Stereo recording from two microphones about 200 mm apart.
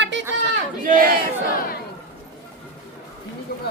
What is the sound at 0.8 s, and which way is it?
Speech, 45° right (ahead or behind).